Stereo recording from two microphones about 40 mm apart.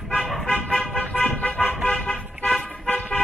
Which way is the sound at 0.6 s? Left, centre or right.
Centre.